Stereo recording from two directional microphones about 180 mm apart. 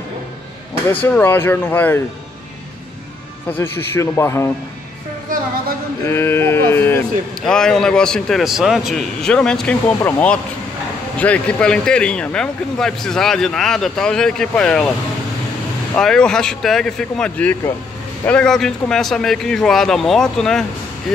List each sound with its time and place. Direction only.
1.0 s speech: 10° left (ahead or behind)
3.5 s speech: 15° left (ahead or behind)
6.0 s a man's voice: 15° left (ahead or behind)
16.0 s a man's voice: 5° left (ahead or behind)